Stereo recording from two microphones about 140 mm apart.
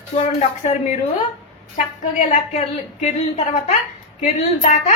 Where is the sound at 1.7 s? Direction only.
60° left (ahead or behind).